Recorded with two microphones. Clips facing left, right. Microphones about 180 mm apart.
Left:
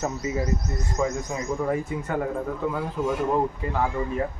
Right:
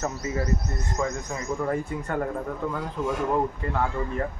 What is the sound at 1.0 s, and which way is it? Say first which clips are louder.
A man's voice: left 3 dB; 5° left (ahead or behind).